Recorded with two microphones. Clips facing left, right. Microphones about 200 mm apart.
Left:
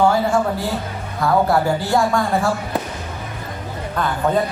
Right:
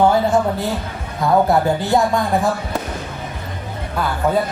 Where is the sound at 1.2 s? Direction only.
20° right (ahead or behind).